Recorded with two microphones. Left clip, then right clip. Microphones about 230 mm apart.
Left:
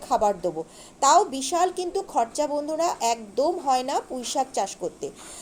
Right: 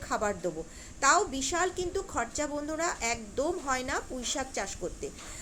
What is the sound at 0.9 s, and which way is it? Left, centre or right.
A woman's voice, centre.